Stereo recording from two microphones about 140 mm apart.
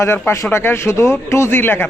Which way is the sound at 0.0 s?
20° left (ahead or behind).